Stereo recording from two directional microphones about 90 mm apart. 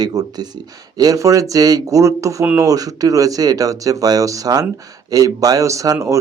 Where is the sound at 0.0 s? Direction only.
45° right (ahead or behind).